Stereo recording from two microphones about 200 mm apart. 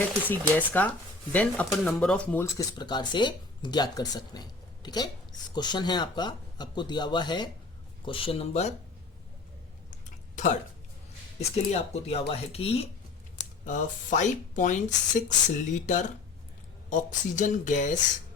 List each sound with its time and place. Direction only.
0.3 s speech: 10° left (ahead or behind); by 8.7 s 30° left (ahead or behind)
9.9 s a sound: 40° left (ahead or behind)
11.3 s speech: 30° left (ahead or behind)